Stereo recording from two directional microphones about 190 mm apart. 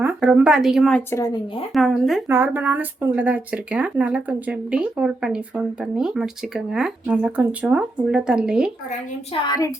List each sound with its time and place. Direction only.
0.0 s speech: 5° right (ahead or behind)
1.1 s speech: 20° left (ahead or behind)
1.7 s speech: centre (ahead or behind)
9.5 s speech: 20° left (ahead or behind)